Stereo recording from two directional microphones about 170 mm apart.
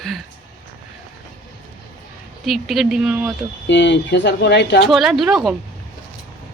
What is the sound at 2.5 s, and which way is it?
Speech, centre (ahead or behind).